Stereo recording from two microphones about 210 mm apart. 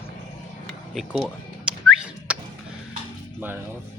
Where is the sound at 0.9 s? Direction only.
Centre (ahead or behind).